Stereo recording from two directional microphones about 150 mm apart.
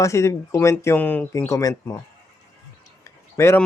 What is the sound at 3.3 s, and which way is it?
Speech, 20° left (ahead or behind).